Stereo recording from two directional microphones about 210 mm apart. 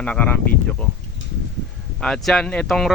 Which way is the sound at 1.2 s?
65° left (ahead or behind).